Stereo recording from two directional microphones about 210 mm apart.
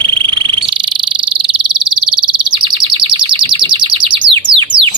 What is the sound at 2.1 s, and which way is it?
Bird, 25° right (ahead or behind).